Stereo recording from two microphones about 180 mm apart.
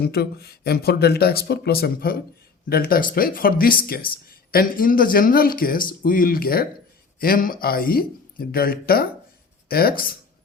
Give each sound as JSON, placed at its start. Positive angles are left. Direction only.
{"t": 0.0, "sound": "speech", "side_deg": 60}